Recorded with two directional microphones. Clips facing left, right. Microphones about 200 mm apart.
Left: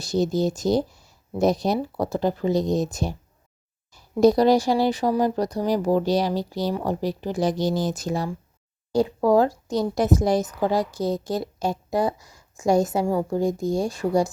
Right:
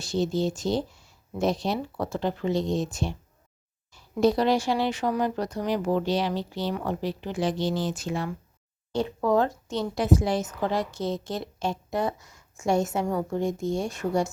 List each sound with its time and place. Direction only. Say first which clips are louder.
0.0 s speech: left 4 dB; 40° left (ahead or behind)